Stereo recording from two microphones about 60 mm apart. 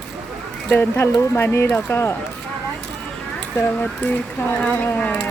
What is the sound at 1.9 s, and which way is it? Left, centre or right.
Speech, left.